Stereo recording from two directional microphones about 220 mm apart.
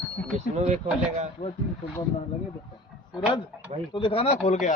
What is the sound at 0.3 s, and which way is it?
Speech, 30° right (ahead or behind).